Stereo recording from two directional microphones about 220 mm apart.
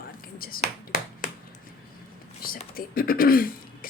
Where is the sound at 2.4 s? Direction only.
40° left (ahead or behind).